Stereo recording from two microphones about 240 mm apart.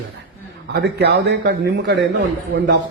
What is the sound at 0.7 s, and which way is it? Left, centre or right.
A man's voice, right.